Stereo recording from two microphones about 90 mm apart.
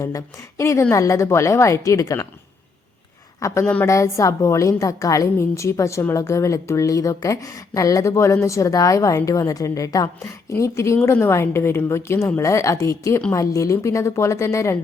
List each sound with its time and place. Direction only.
0.0 s a woman's voice: 35° left (ahead or behind)
3.4 s a woman's voice: 35° left (ahead or behind)